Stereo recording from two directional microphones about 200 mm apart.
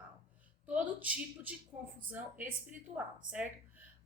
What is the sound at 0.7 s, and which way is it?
A woman's voice, 5° right (ahead or behind).